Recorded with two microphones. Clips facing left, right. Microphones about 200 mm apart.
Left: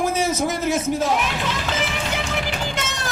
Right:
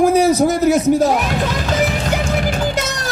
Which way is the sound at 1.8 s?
45° right (ahead or behind).